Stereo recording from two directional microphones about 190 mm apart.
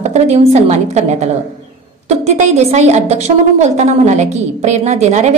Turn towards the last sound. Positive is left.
turn(degrees=-35)  # may be behind; listen again after turning